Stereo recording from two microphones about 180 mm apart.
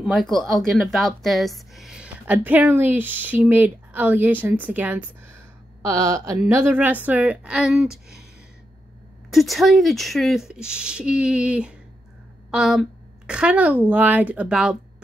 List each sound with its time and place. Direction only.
0.0 s speech: centre (ahead or behind)
9.3 s speech: centre (ahead or behind)